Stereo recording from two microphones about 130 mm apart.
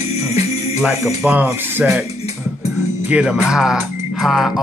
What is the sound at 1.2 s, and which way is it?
Speech, 10° right (ahead or behind).